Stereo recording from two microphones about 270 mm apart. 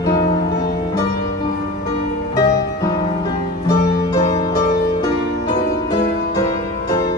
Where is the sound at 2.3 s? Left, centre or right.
Centre.